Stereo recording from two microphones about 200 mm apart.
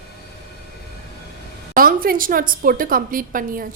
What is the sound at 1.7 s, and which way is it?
A woman's voice, 45° right (ahead or behind).